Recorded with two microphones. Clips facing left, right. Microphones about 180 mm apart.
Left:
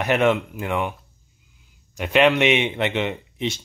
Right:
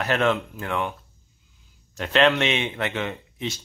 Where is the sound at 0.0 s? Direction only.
15° left (ahead or behind).